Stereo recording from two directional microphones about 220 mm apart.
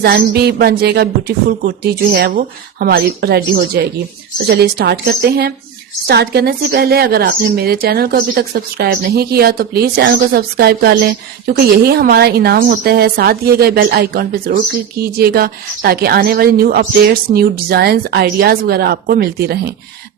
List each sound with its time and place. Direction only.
0.0 s a woman's voice: 45° right (ahead or behind)